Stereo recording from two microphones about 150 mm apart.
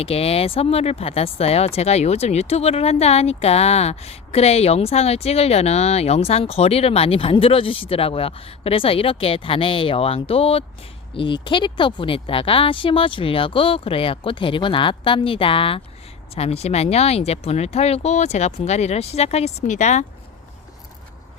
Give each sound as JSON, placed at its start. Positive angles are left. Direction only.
{"t": 0.0, "sound": "speech", "side_deg": 40}